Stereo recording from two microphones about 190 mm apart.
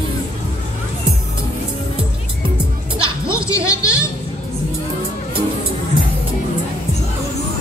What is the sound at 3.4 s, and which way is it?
Music, 15° left (ahead or behind).